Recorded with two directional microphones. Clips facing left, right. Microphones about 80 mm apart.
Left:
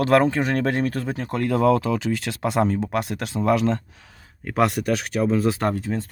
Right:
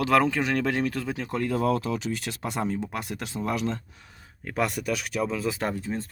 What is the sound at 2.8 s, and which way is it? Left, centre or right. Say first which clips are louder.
Speech: left 8 dB; left.